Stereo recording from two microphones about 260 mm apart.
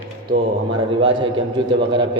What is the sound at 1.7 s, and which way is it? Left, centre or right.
Speech, centre.